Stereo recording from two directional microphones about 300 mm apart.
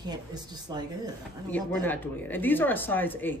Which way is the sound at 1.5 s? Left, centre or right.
Centre.